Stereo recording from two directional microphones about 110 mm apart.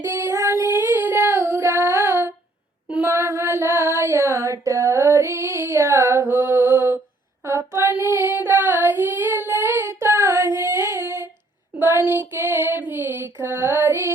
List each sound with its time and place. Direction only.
0.0 s child singing: 20° right (ahead or behind)
3.1 s female singing: 25° right (ahead or behind)
7.4 s child singing: 25° right (ahead or behind)